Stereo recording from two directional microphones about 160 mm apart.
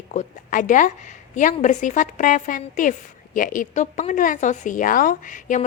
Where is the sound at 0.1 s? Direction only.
55° left (ahead or behind).